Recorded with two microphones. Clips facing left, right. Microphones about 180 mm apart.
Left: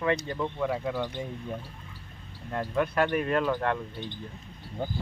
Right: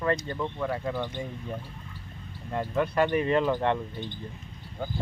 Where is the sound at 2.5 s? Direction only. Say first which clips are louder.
Even; 5° right (ahead or behind).